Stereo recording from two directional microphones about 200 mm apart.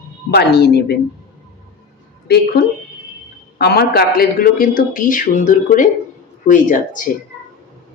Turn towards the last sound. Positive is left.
turn(degrees=40)  # may be behind; listen again after turning